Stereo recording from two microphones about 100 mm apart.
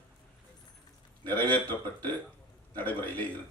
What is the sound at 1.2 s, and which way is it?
Speech, 20° left (ahead or behind).